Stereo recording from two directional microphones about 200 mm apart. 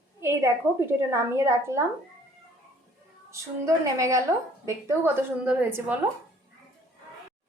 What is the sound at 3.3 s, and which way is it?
A woman's voice, 15° right (ahead or behind).